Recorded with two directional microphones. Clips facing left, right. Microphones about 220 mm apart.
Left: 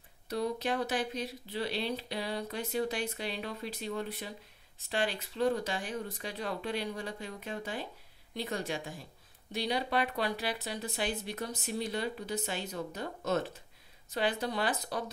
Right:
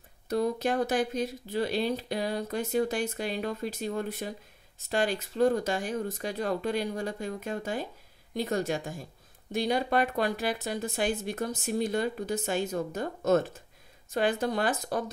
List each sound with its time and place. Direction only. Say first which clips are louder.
0.3 s speech: right 5 dB; 45° right (ahead or behind)